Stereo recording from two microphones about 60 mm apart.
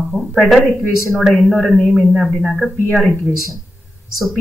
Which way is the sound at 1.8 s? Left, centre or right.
Centre.